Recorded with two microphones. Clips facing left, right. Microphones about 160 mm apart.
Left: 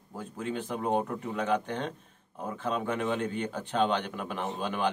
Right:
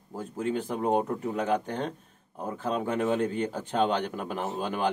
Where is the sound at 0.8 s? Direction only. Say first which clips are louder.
Right 3 dB; 35° right (ahead or behind).